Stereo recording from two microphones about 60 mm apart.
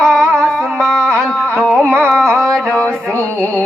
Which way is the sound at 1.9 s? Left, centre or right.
Centre.